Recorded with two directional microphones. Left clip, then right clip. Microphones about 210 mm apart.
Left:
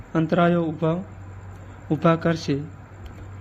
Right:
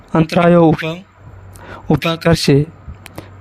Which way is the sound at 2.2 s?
50° right (ahead or behind).